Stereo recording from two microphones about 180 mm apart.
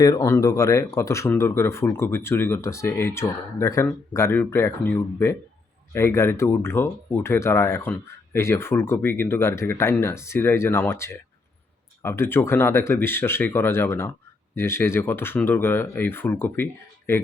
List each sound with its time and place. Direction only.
0.0 s speech: 20° left (ahead or behind)